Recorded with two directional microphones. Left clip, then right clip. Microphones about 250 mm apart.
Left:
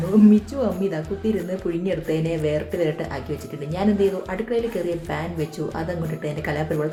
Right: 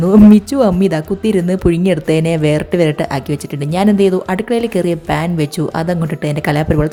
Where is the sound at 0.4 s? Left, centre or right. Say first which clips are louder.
Right 11 dB; right.